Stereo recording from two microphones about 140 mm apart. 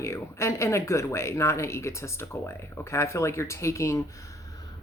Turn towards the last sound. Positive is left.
turn(degrees=20)  # may be behind; listen again after turning